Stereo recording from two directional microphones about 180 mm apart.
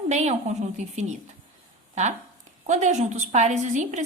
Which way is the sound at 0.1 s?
40° right (ahead or behind).